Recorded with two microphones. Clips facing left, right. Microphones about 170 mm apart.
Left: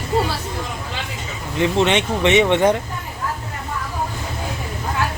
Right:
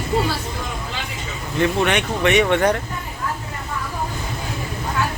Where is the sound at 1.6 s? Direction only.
20° left (ahead or behind).